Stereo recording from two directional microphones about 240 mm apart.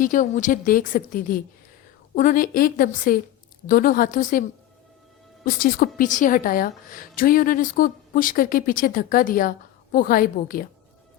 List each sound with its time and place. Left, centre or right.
0.0 s a woman's voice: left
5.5 s a woman's voice: left